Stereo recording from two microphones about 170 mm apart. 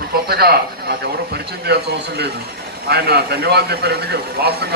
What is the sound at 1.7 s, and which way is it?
Speech, 70° right (ahead or behind).